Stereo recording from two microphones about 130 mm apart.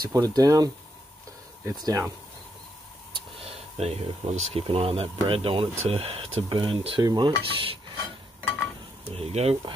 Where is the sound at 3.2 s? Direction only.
50° right (ahead or behind).